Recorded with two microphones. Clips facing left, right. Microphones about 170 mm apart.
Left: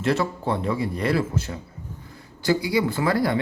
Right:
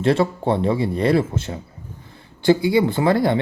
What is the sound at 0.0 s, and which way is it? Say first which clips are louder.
Speech: right 5 dB; 25° right (ahead or behind).